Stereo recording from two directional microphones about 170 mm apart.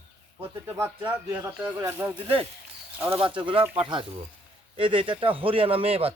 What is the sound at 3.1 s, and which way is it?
Speech, 30° right (ahead or behind).